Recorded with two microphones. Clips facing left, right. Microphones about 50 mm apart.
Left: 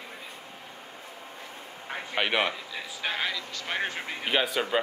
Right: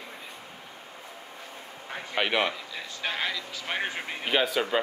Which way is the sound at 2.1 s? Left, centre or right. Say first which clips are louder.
Even; centre.